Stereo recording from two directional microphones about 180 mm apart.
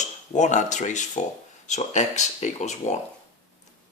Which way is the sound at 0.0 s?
40° left (ahead or behind).